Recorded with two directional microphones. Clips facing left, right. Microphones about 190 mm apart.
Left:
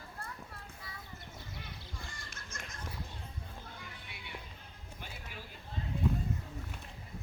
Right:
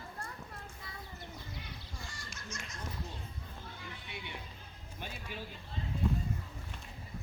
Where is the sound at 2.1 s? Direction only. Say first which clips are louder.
Right 2 dB; 55° left (ahead or behind).